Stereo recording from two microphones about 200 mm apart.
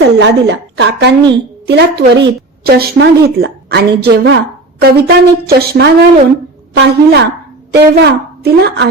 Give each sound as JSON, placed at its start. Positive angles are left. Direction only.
{"t": 0.2, "sound": "a woman's voice", "side_deg": -60}